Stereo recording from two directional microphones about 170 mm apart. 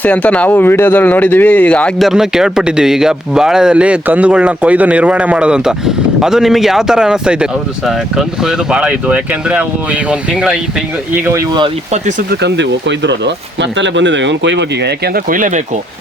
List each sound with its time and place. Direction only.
0.0 s speech: 10° left (ahead or behind); by 11.4 s 10° right (ahead or behind)
11.9 s speech: 45° right (ahead or behind)
12.3 s speech: 90° right; by 15.8 s 45° right (ahead or behind)